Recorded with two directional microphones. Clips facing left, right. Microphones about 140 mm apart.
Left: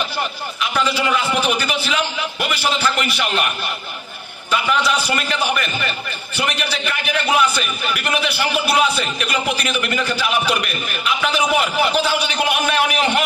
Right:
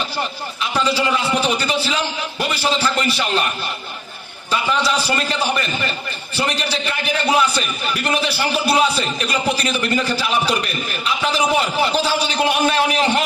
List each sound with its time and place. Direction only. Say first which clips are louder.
0.6 s a man's voice: right 1 dB; 30° right (ahead or behind)
4.7 s a man's voice: even; 30° right (ahead or behind)